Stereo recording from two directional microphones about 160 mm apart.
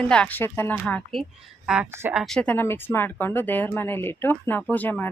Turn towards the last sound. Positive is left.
turn(degrees=10)  # may be behind; listen again after turning